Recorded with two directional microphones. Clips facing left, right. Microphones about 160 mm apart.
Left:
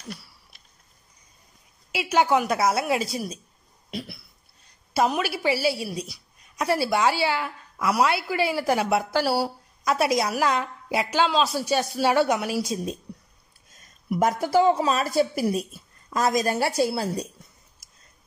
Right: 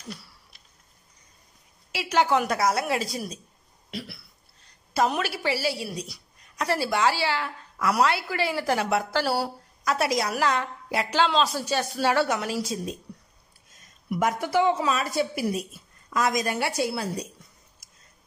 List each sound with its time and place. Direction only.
1.9 s speech: 15° left (ahead or behind)
4.9 s a woman's voice: 10° left (ahead or behind)
14.2 s a woman's voice: 40° left (ahead or behind)